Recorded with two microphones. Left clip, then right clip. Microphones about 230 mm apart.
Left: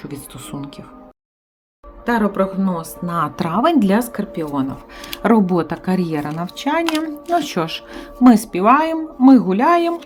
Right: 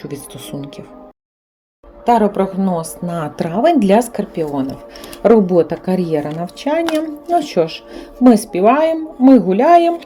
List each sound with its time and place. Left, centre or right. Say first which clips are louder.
0.0 s a woman's voice: right 4 dB; centre
2.0 s a woman's voice: right 5 dB; centre
5.2 s a woman's voice: right 6 dB; centre